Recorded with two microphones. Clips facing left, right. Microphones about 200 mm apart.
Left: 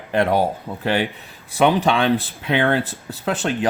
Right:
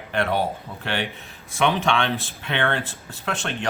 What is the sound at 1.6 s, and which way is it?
Speech, 35° left (ahead or behind).